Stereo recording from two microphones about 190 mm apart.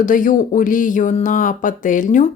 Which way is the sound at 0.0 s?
45° left (ahead or behind).